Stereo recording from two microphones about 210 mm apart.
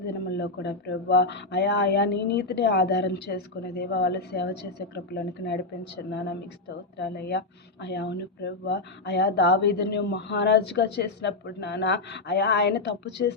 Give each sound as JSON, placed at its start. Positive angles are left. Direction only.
{"t": 0.0, "sound": "speech", "side_deg": 55}